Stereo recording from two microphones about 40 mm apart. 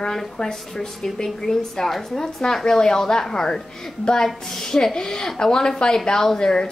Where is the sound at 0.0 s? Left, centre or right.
Centre.